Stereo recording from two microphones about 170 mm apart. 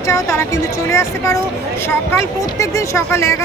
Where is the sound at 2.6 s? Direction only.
20° left (ahead or behind).